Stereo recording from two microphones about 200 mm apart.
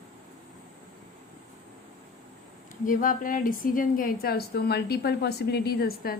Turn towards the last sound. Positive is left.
turn(degrees=50)  # may be behind; listen again after turning